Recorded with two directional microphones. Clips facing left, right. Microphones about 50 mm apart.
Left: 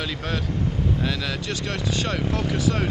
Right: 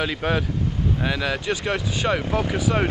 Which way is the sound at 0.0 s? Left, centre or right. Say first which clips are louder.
Right 5 dB; centre.